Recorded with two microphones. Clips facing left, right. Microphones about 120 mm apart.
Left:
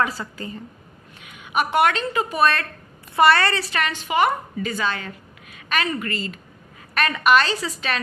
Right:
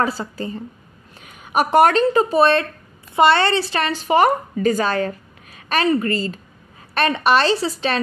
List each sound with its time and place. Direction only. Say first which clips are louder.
0.0 s a woman's voice: right 3 dB; 30° right (ahead or behind)